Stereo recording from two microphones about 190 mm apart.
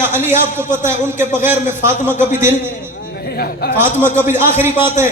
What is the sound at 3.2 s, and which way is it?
Speech, 55° left (ahead or behind).